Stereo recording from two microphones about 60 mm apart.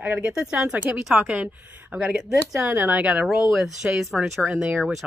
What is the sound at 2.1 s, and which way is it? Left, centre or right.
Speech, centre.